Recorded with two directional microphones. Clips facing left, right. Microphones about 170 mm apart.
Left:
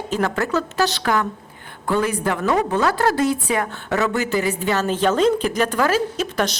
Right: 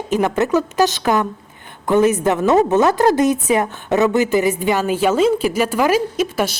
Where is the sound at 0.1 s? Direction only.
15° right (ahead or behind).